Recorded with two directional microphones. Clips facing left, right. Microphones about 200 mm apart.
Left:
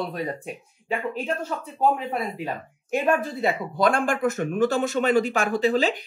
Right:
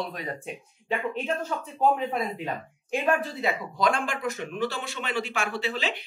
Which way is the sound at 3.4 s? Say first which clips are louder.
Left 4 dB; 50° left (ahead or behind).